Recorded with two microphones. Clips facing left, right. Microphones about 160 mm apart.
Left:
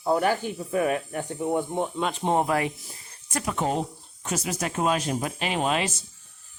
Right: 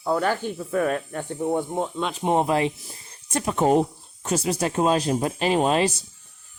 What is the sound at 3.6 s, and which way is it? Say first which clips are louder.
Speech: right 8 dB; 55° right (ahead or behind).